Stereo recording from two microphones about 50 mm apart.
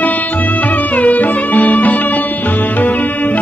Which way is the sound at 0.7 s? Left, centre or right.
Left.